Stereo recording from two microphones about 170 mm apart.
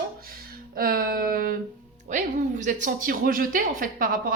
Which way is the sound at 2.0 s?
45° right (ahead or behind).